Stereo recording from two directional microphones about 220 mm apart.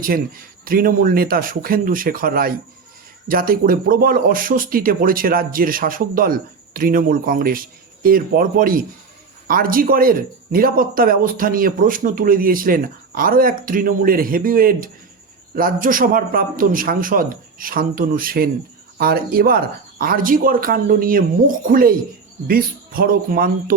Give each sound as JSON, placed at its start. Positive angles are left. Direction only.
{"t": 0.0, "sound": "speech", "side_deg": -40}